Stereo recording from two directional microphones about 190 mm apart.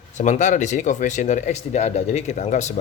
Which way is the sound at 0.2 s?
40° left (ahead or behind).